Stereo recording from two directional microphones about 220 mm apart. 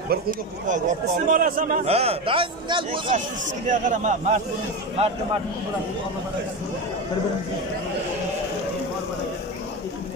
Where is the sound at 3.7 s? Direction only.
35° right (ahead or behind).